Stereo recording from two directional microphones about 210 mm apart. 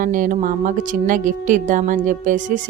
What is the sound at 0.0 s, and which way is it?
A woman's voice, 40° right (ahead or behind).